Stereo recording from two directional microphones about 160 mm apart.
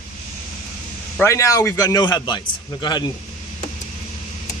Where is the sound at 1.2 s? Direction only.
20° left (ahead or behind).